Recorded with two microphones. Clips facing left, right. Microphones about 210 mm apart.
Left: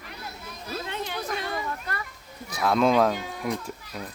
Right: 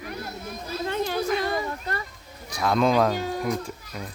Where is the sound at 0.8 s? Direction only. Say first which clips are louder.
Right 10 dB; 40° right (ahead or behind).